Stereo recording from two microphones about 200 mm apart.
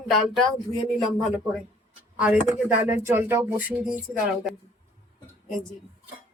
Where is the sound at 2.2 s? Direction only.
10° right (ahead or behind).